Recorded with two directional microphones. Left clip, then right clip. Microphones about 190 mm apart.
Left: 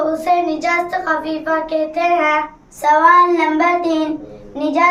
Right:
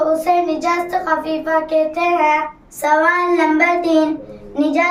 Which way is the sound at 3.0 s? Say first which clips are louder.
Left 7 dB; 15° right (ahead or behind).